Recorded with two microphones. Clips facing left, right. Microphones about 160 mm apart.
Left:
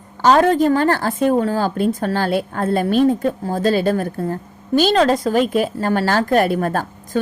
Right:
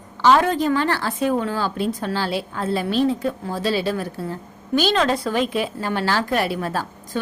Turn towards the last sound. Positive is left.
turn(degrees=50)  # may be behind; listen again after turning